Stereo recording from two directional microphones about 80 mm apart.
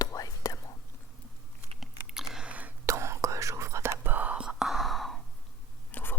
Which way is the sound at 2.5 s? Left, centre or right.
Centre.